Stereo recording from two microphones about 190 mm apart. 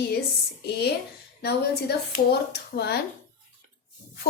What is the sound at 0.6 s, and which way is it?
A woman's voice, 60° left (ahead or behind).